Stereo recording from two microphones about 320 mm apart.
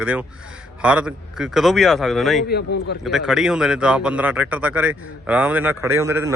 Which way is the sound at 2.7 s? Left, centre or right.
Left.